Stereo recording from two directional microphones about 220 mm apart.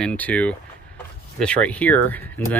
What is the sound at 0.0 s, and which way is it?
Speech, 5° left (ahead or behind).